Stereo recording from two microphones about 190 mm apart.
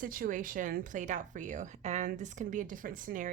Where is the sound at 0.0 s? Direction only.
45° right (ahead or behind).